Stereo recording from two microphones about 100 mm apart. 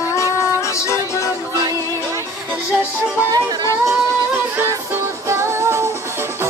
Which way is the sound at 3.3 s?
40° right (ahead or behind).